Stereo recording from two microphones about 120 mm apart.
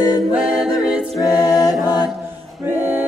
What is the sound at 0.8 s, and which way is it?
A capella, 5° right (ahead or behind).